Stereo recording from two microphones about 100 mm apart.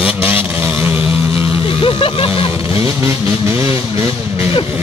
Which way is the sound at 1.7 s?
65° left (ahead or behind).